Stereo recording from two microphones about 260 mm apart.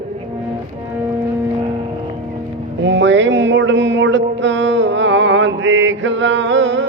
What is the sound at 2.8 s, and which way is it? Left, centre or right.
Music, right.